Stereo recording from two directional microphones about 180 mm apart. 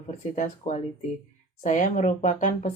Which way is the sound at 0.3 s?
40° left (ahead or behind).